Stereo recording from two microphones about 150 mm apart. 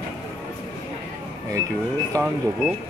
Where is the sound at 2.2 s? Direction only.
20° right (ahead or behind).